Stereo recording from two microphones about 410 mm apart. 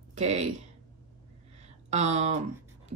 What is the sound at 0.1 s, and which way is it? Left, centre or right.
Speech, centre.